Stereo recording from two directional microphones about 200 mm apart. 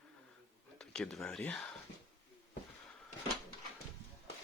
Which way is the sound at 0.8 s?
5° left (ahead or behind).